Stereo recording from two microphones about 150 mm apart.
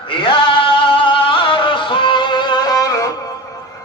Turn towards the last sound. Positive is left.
turn(degrees=25)  # may be behind; listen again after turning